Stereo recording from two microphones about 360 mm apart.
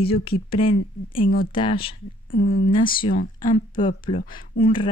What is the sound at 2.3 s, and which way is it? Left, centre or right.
Speech, left.